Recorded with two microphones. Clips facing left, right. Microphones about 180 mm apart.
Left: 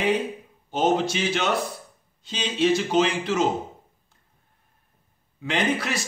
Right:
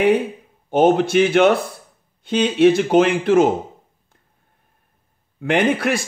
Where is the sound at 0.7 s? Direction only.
55° right (ahead or behind).